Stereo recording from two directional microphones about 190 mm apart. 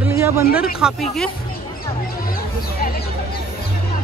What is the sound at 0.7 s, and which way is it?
Speech, centre (ahead or behind).